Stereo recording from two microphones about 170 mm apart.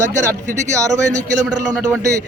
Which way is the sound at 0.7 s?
20° right (ahead or behind).